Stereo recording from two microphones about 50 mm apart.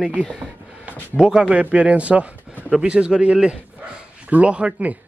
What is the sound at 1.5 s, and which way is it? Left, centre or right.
A man's voice, right.